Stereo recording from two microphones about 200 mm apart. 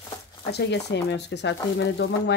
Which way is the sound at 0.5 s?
60° left (ahead or behind).